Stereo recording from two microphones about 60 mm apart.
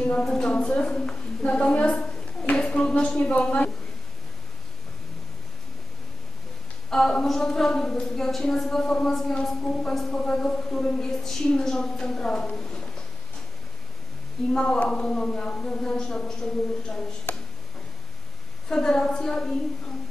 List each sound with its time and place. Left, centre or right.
0.2 s a woman's voice: centre
2.5 s a sound: centre
6.9 s a woman's voice: centre
14.5 s a woman's voice: centre
18.7 s a woman's voice: centre